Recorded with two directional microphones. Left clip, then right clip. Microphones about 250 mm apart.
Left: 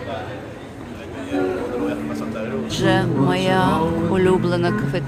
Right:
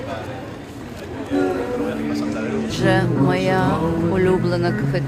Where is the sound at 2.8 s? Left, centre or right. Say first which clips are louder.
Even; centre.